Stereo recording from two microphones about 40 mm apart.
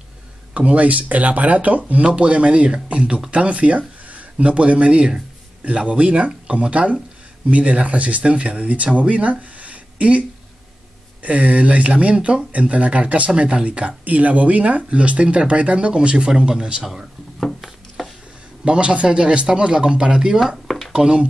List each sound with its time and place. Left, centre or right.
0.6 s speech: right
11.2 s speech: right
17.6 s a sound: centre
18.6 s speech: right
20.3 s speech: centre
20.6 s a sound: centre
20.9 s speech: right